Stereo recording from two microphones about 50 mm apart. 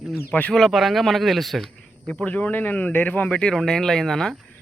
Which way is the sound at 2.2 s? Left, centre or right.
Left.